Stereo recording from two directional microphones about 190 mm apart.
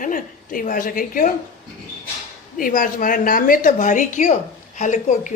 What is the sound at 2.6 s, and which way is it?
A woman's voice, 45° left (ahead or behind).